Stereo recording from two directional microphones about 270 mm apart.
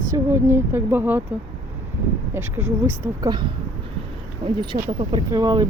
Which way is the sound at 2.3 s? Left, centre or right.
Centre.